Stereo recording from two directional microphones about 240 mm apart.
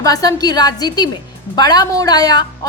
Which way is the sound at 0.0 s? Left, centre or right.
Centre.